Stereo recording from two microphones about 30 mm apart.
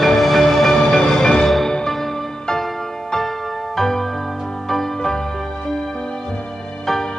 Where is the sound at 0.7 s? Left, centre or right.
Centre.